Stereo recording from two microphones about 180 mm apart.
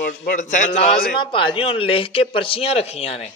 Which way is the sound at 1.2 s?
30° left (ahead or behind).